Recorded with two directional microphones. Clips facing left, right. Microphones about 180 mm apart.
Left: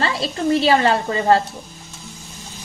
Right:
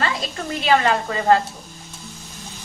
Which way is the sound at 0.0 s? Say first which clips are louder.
Left 5 dB; 30° left (ahead or behind).